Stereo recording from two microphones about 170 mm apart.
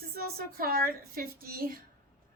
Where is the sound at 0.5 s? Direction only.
60° right (ahead or behind).